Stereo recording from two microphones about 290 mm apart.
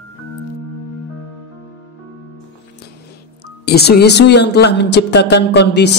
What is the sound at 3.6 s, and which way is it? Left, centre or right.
A woman's voice, left.